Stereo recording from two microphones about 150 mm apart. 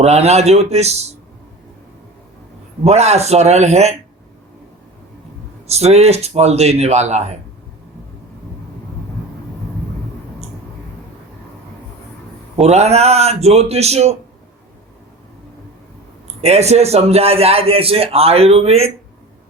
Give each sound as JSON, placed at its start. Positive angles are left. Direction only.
{"t": 0.0, "sound": "a man's voice", "side_deg": -45}
{"t": 2.8, "sound": "a man's voice", "side_deg": -45}
{"t": 5.6, "sound": "a man's voice", "side_deg": -45}
{"t": 12.5, "sound": "a man's voice", "side_deg": -45}
{"t": 16.4, "sound": "a man's voice", "side_deg": -45}